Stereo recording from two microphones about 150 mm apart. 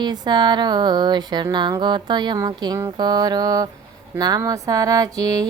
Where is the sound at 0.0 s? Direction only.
30° right (ahead or behind).